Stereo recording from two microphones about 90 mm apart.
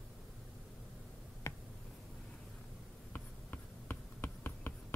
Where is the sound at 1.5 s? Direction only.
30° left (ahead or behind).